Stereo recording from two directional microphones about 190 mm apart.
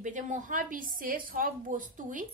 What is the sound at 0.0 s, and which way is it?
Speech, 40° right (ahead or behind).